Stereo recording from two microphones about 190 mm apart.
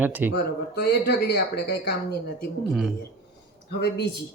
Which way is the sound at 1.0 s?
60° left (ahead or behind).